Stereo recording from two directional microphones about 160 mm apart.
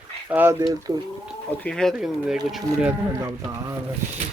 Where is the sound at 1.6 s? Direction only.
5° left (ahead or behind).